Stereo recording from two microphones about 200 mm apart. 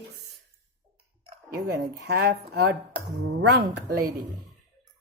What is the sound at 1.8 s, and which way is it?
A woman's voice, 50° right (ahead or behind).